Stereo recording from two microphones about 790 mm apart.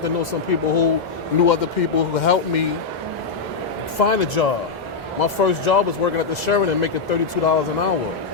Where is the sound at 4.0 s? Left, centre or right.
Left.